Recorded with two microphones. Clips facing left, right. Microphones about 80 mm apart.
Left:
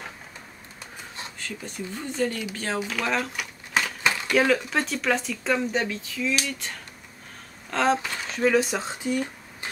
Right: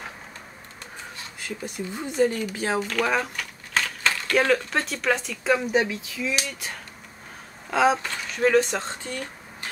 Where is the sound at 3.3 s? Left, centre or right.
Centre.